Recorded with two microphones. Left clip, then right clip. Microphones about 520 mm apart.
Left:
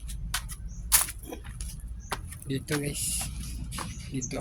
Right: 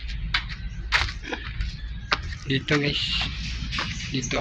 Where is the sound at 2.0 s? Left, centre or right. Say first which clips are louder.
Right 10 dB; left.